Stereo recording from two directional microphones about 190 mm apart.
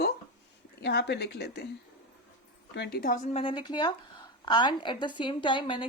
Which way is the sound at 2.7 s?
60° left (ahead or behind).